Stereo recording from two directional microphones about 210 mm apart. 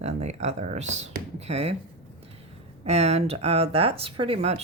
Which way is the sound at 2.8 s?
30° right (ahead or behind).